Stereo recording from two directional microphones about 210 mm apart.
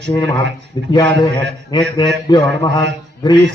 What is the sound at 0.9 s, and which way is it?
A man's voice, 20° left (ahead or behind).